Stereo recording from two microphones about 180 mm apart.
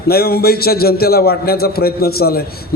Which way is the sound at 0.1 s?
60° left (ahead or behind).